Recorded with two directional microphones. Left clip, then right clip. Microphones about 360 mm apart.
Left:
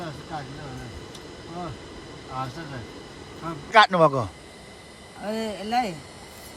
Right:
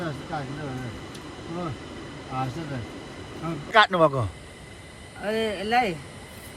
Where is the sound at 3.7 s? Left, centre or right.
Centre.